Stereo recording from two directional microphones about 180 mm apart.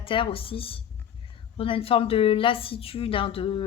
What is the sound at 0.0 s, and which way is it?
A woman's voice, 30° left (ahead or behind).